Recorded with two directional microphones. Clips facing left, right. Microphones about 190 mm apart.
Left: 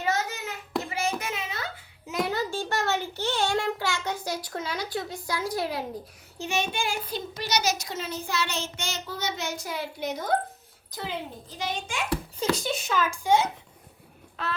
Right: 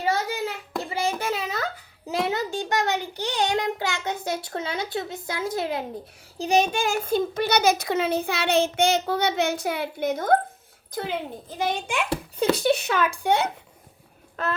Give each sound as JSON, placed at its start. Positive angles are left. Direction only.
{"t": 0.0, "sound": "a sound", "side_deg": -30}
{"t": 2.0, "sound": "a child's voice", "side_deg": -25}
{"t": 6.4, "sound": "a child's voice", "side_deg": -40}